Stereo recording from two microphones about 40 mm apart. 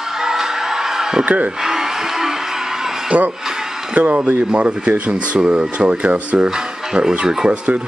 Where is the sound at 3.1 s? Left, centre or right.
Right.